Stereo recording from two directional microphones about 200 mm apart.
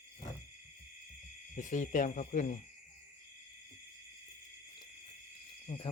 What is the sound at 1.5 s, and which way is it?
Speech, 40° left (ahead or behind).